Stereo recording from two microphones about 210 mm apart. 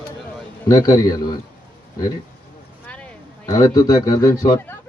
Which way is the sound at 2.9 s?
5° left (ahead or behind).